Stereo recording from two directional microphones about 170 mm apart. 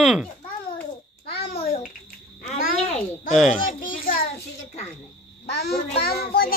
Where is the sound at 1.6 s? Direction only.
40° left (ahead or behind).